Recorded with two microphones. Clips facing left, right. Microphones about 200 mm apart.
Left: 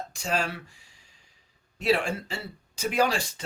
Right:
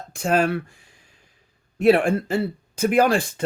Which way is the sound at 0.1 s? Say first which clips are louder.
Right 11 dB; 55° right (ahead or behind).